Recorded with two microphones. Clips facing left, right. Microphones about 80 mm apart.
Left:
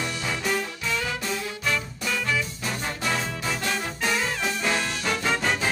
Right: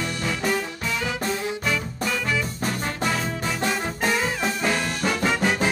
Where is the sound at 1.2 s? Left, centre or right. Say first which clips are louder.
Right 4 dB; right.